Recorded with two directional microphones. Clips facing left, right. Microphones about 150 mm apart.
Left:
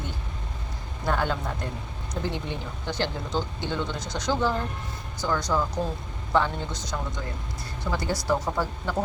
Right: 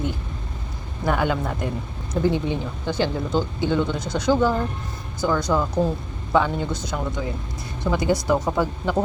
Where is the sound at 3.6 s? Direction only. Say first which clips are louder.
Right 8 dB; 10° right (ahead or behind).